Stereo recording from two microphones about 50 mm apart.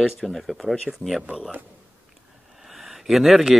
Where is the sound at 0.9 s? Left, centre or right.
Centre.